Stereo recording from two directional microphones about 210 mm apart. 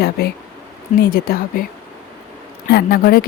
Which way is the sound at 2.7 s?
50° left (ahead or behind).